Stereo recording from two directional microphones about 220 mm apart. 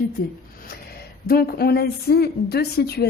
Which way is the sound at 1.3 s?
45° left (ahead or behind).